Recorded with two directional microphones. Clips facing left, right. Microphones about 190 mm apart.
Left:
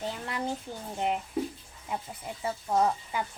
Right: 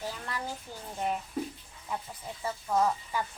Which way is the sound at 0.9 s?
20° left (ahead or behind).